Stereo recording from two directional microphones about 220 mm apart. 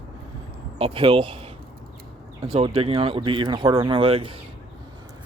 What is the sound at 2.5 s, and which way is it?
Speech, 25° right (ahead or behind).